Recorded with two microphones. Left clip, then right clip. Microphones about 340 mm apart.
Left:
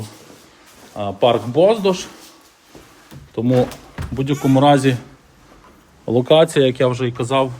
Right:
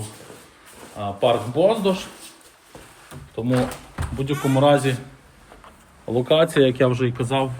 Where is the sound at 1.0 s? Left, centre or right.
Left.